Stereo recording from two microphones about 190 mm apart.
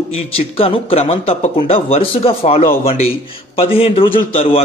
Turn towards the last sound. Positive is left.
turn(degrees=30)  # may be behind; listen again after turning